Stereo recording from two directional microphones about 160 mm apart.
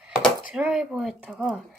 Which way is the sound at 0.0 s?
5° right (ahead or behind).